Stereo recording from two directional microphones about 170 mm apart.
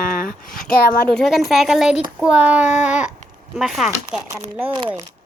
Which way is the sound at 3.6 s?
Centre (ahead or behind).